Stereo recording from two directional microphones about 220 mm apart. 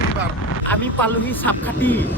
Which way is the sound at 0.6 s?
10° left (ahead or behind).